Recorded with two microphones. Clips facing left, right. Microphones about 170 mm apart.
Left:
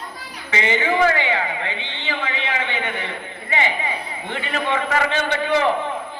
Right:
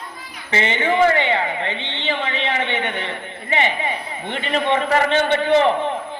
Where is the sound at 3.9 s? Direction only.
25° right (ahead or behind).